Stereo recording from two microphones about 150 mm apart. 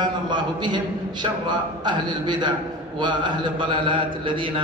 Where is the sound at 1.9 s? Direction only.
30° right (ahead or behind).